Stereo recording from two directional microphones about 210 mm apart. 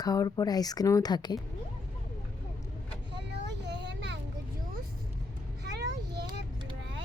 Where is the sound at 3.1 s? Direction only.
55° right (ahead or behind).